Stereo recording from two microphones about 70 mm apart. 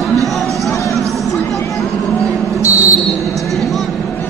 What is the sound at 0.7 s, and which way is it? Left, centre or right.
Music, left.